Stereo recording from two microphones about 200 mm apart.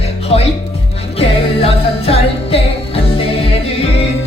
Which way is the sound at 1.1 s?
30° left (ahead or behind).